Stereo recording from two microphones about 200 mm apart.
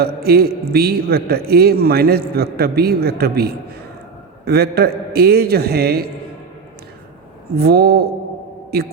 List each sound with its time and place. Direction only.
0.0 s a man's voice: 50° right (ahead or behind)
7.6 s a man's voice: 50° right (ahead or behind)